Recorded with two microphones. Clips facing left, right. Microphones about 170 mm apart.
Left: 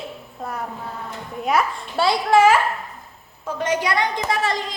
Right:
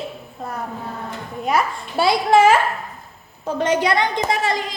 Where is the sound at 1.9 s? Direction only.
15° right (ahead or behind).